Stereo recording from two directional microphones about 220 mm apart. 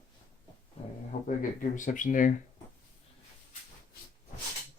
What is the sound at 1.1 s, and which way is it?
Speech, 35° left (ahead or behind).